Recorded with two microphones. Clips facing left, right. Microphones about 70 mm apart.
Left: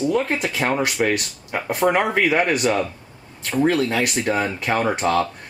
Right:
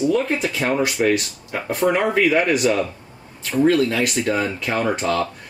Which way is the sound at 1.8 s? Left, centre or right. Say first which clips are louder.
Even; centre.